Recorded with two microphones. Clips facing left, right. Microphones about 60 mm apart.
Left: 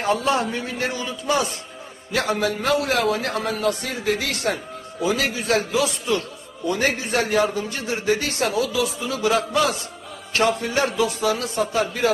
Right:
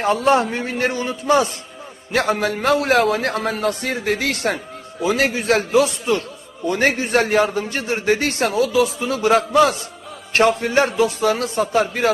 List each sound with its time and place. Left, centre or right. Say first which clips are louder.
0.0 s a man's voice: right 5 dB; right